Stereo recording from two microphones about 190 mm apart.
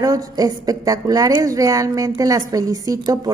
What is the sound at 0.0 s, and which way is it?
A woman's voice, 20° right (ahead or behind).